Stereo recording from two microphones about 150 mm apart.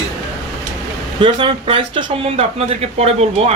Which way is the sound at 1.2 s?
35° right (ahead or behind).